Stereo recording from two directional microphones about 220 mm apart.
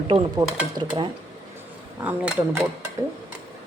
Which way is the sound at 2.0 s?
5° right (ahead or behind).